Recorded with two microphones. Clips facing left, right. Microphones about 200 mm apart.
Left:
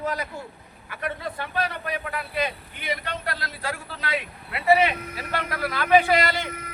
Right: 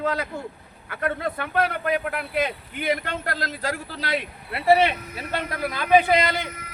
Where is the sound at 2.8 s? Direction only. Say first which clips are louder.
Right 6 dB; 50° right (ahead or behind).